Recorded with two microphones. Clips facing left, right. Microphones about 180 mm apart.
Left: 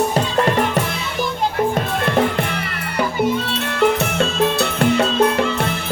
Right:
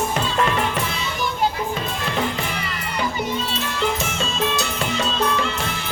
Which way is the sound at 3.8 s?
60° left (ahead or behind).